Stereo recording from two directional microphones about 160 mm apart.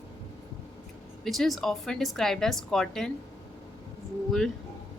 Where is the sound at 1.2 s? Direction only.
Centre (ahead or behind).